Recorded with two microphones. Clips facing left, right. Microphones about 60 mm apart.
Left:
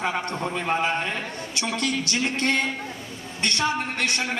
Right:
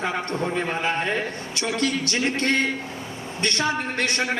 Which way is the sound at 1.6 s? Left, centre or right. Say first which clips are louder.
Right 2 dB; right.